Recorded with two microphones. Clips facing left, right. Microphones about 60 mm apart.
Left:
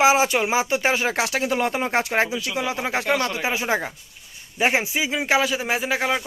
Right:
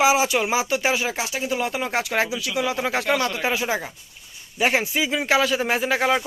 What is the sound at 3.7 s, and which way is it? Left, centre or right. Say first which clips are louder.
Speech: left 3 dB; left.